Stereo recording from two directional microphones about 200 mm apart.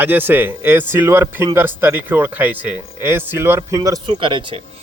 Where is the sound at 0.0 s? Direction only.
10° right (ahead or behind).